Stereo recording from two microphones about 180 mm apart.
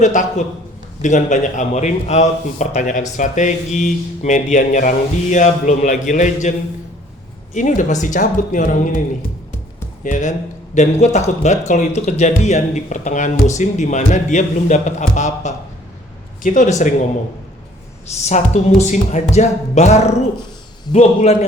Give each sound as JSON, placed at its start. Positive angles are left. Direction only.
{"t": 0.0, "sound": "speech", "side_deg": 45}
{"t": 7.5, "sound": "speech", "side_deg": 45}
{"t": 10.0, "sound": "speech", "side_deg": 45}
{"t": 18.2, "sound": "speech", "side_deg": 40}